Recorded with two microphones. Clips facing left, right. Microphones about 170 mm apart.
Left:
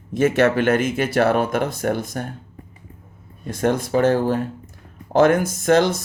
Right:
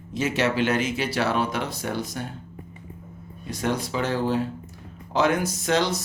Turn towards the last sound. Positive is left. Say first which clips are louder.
# left 7 dB
turn(degrees=50)  # may be behind; listen again after turning